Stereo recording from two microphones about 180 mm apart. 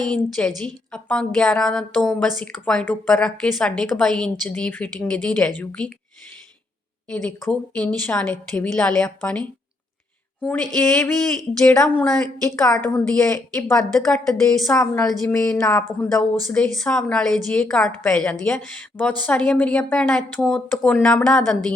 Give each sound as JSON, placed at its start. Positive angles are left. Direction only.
{"t": 0.0, "sound": "a woman's voice", "side_deg": 5}
{"t": 7.1, "sound": "a woman's voice", "side_deg": 5}
{"t": 10.4, "sound": "a woman's voice", "side_deg": 10}
{"t": 14.7, "sound": "a woman's voice", "side_deg": 15}
{"t": 15.4, "sound": "a woman's voice", "side_deg": 5}